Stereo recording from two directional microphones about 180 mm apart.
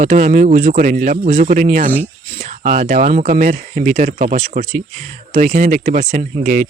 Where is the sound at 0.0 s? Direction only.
45° right (ahead or behind).